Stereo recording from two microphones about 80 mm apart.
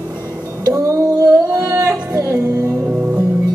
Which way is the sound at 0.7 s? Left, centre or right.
Right.